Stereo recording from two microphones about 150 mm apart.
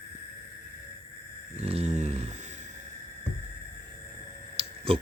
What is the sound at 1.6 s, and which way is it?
Speech, 45° right (ahead or behind).